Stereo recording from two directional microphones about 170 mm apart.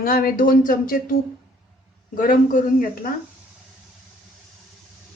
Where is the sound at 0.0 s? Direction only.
60° left (ahead or behind).